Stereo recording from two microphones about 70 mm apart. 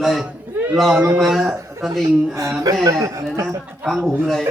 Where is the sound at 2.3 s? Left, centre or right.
Right.